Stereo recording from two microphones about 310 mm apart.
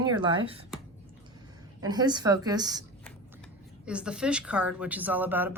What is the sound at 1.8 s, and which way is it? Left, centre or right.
Speech, centre.